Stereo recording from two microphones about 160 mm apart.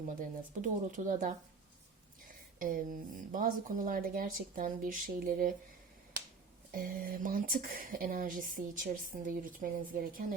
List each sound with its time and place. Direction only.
0.2 s speech: 50° right (ahead or behind)
6.7 s speech: 60° right (ahead or behind)